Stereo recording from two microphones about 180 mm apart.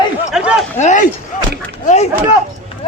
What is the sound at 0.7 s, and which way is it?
Speech, 40° left (ahead or behind).